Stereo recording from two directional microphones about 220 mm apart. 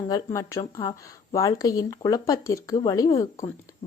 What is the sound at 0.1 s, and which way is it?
Speech, 15° left (ahead or behind).